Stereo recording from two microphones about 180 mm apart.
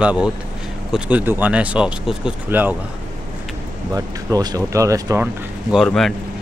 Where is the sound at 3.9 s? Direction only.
20° right (ahead or behind).